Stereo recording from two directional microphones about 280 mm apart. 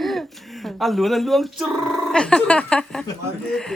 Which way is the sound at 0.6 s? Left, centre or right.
Centre.